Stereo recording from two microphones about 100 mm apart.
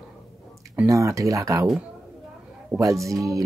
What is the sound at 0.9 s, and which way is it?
Speech, 30° right (ahead or behind).